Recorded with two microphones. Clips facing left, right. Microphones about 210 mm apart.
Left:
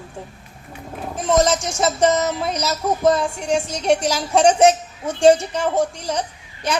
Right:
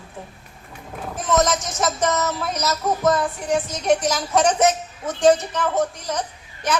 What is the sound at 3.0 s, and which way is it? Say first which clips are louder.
Speech: left 3 dB; 30° left (ahead or behind).